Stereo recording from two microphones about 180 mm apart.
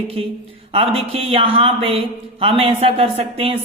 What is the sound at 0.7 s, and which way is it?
Speech, 30° right (ahead or behind).